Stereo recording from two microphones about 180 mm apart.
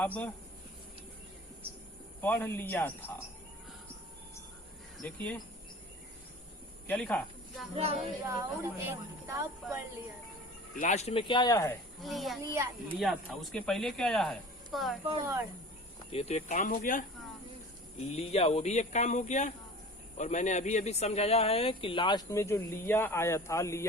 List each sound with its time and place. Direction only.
0.0 s speech: 10° left (ahead or behind)
2.2 s speech: 10° left (ahead or behind)
5.0 s speech: 10° left (ahead or behind)
6.8 s speech: 5° left (ahead or behind)
8.2 s speech: 15° right (ahead or behind)
10.8 s speech: 40° left (ahead or behind); by 11.7 s 20° left (ahead or behind)
11.9 s speech: centre (ahead or behind)
12.5 s speech: 25° right (ahead or behind)
13.0 s speech: centre (ahead or behind)
15.2 s speech: 15° right (ahead or behind)
16.1 s speech: 40° left (ahead or behind)
18.1 s speech: 35° left (ahead or behind); by 23.8 s 15° left (ahead or behind)